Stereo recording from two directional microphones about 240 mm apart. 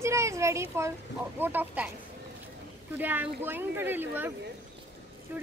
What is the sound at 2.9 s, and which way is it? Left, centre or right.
Speech, centre.